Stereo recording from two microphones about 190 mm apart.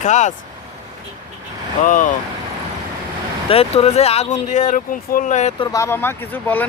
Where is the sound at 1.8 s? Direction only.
45° left (ahead or behind).